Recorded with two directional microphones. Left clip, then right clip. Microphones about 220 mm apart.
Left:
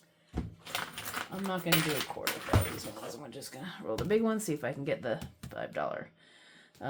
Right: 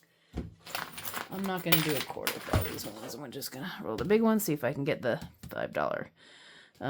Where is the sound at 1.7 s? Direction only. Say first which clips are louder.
Even; 40° right (ahead or behind).